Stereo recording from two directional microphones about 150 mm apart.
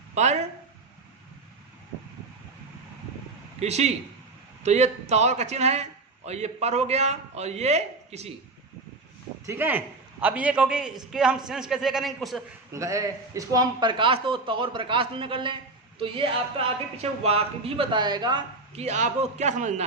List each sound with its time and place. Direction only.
0.1 s speech: 50° right (ahead or behind)
3.6 s a man's voice: 45° right (ahead or behind)
9.5 s a man's voice: 15° right (ahead or behind)
12.7 s a man's voice: 20° right (ahead or behind)
18.7 s a man's voice: 50° right (ahead or behind)